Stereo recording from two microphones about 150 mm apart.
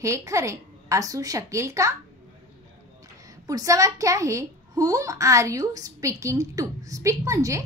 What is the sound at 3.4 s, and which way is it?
A child's voice, 25° right (ahead or behind).